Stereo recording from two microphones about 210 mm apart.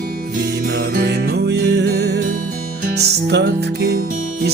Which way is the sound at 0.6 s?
45° right (ahead or behind).